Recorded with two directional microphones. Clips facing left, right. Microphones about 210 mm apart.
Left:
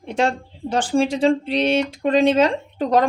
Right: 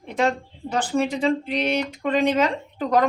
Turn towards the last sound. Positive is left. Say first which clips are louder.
# left 3 dB
turn(degrees=30)  # may be behind; listen again after turning